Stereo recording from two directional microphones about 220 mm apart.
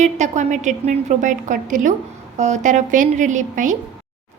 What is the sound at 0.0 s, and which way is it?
A woman's voice, 30° right (ahead or behind).